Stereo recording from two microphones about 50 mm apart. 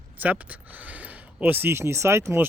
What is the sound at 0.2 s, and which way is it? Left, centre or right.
Speech, right.